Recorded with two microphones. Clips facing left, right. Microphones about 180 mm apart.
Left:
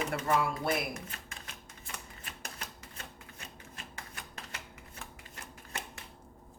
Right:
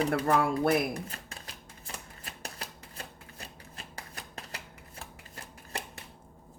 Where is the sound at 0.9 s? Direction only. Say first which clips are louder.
Right 5 dB; 35° right (ahead or behind).